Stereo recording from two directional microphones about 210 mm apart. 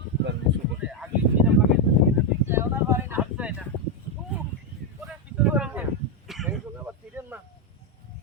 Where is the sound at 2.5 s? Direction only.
10° right (ahead or behind).